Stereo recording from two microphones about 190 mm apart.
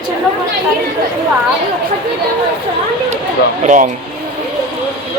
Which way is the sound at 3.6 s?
40° right (ahead or behind).